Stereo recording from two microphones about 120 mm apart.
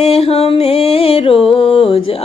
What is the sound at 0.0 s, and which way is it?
Music, 55° left (ahead or behind).